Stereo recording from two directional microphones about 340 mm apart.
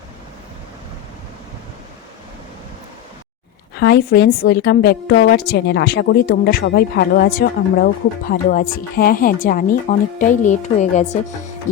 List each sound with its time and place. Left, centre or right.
3.8 s a woman's voice: left